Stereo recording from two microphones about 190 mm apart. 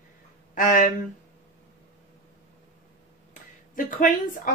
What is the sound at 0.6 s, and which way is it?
Speech, 45° left (ahead or behind).